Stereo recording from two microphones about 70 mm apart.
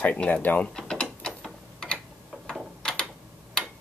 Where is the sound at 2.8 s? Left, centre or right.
Centre.